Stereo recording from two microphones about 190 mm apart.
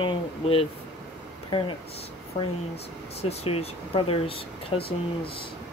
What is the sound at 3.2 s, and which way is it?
Speech, 35° left (ahead or behind).